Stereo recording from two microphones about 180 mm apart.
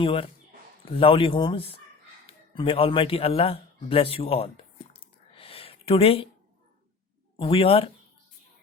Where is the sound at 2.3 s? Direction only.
30° left (ahead or behind).